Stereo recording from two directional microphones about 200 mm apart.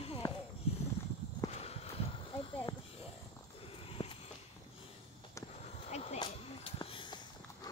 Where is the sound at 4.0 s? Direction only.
30° left (ahead or behind).